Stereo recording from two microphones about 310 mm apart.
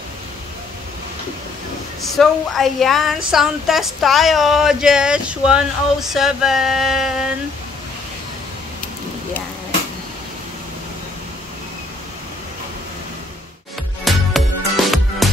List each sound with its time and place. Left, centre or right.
2.1 s speech: centre
14.0 s music: centre